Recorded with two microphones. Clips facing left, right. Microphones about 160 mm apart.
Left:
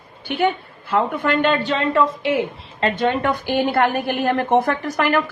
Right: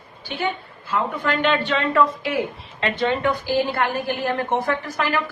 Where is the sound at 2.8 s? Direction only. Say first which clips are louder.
Left 2 dB; 50° left (ahead or behind).